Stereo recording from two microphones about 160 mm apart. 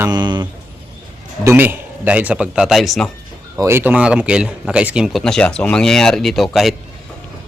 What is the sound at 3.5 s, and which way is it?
Speech, 15° right (ahead or behind).